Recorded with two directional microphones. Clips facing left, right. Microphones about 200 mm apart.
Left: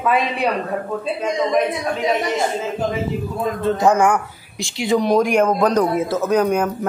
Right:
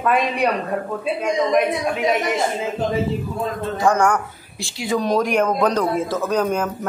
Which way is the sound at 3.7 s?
20° left (ahead or behind).